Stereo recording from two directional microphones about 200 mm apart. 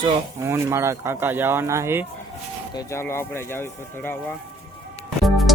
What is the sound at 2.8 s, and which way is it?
Speech, 15° left (ahead or behind).